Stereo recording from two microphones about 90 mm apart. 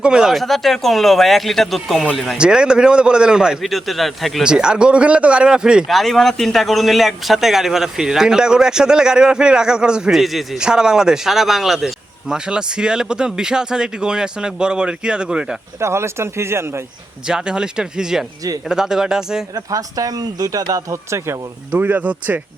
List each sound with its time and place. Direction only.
0.0 s speech: 10° right (ahead or behind)
2.4 s a man's voice: 10° right (ahead or behind)
15.8 s speech: 30° right (ahead or behind)
17.2 s a man's voice: 10° right (ahead or behind)
19.5 s speech: 40° right (ahead or behind); by 22.4 s 15° right (ahead or behind)